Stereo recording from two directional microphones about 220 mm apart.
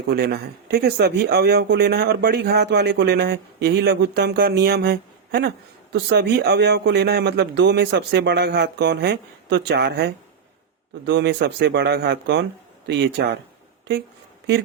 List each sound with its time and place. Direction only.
0.1 s speech: 45° right (ahead or behind)